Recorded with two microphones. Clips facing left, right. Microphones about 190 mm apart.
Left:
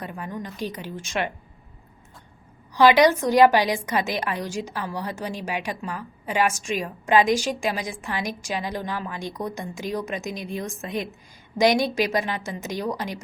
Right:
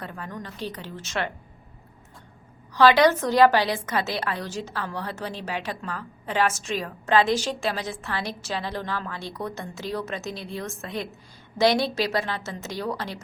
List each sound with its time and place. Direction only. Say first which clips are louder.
0.0 s a woman's voice: left 3 dB; 15° left (ahead or behind)
2.7 s a woman's voice: left 1 dB; 15° left (ahead or behind)